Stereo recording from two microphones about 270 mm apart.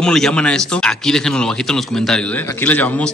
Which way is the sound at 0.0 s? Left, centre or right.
Centre.